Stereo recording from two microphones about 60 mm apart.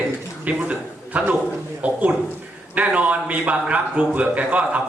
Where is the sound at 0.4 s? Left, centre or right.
Right.